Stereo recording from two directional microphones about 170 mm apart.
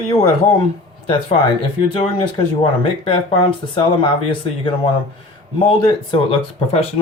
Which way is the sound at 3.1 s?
30° left (ahead or behind).